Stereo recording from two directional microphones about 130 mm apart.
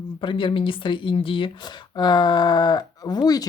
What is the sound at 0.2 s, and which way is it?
Speech, 40° left (ahead or behind).